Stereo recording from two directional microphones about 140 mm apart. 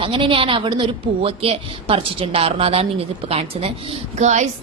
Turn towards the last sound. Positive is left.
turn(degrees=-55)  # may be behind; listen again after turning